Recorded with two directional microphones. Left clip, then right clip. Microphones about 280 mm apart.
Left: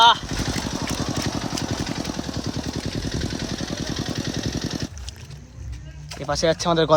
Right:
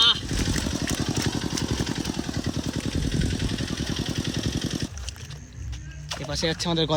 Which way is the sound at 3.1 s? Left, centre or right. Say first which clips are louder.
Left 1 dB; left.